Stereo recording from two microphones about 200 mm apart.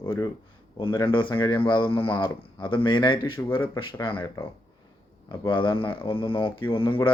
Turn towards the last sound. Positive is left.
turn(degrees=25)  # may be behind; listen again after turning